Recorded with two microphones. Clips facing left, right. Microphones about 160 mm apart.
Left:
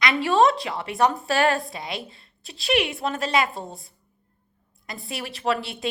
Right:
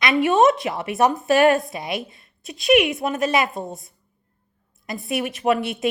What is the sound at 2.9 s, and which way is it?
A woman's voice, 20° right (ahead or behind).